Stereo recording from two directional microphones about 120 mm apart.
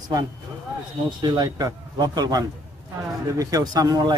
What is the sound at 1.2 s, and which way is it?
A man's voice, 30° right (ahead or behind).